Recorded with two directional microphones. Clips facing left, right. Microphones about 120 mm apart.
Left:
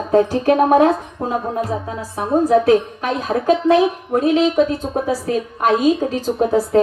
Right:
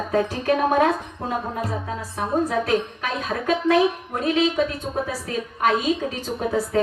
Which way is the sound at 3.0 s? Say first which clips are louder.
Left 7 dB; 25° left (ahead or behind).